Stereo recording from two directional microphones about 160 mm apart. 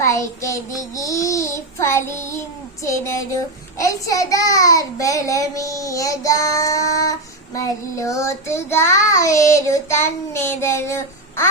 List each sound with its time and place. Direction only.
0.0 s child singing: 20° left (ahead or behind)
2.8 s a child's voice: 20° left (ahead or behind)